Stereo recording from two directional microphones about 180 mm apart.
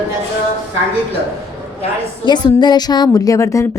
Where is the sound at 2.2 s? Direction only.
25° left (ahead or behind).